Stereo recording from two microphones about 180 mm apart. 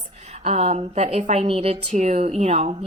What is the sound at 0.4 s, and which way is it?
A woman's voice, 40° right (ahead or behind).